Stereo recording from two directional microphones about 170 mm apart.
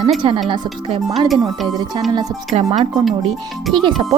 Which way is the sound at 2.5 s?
35° right (ahead or behind).